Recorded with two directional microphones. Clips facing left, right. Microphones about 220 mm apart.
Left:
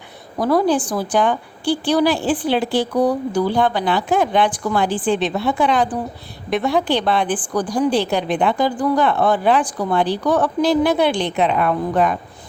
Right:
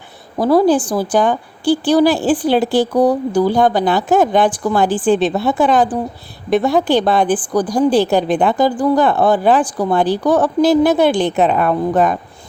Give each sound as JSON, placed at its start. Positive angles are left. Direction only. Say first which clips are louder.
{"t": 0.3, "sound": "a woman's voice", "louder": "right 5 dB", "side_deg": -30}